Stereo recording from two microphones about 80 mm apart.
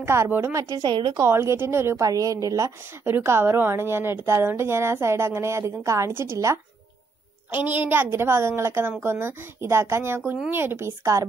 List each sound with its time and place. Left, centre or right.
0.0 s a woman's voice: right
0.8 s a woman's voice: right
1.2 s a woman's voice: right
2.0 s a woman's voice: right
3.1 s a woman's voice: right
7.5 s a woman's voice: right